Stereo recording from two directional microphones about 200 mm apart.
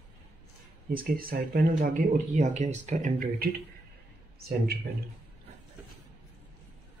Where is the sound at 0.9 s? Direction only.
45° right (ahead or behind).